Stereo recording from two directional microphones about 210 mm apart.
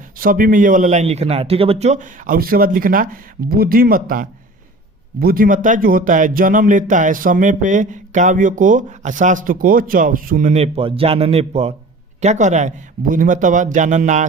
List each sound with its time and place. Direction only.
0.2 s speech: 40° right (ahead or behind)